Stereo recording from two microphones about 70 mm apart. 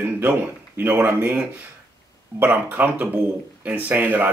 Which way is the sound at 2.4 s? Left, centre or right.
Right.